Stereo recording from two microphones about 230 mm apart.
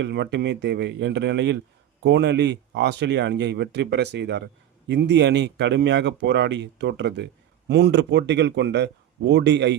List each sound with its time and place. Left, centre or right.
0.0 s speech: right